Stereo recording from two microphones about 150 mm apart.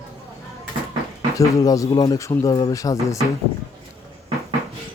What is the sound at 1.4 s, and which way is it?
Speech, 20° left (ahead or behind).